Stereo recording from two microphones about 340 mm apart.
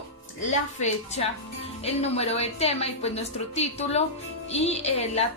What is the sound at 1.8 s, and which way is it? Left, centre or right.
A woman's voice, centre.